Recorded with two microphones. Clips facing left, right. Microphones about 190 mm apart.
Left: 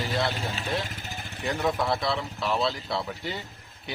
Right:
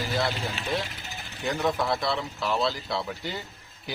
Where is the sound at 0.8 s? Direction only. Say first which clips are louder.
Left 2 dB; 45° left (ahead or behind).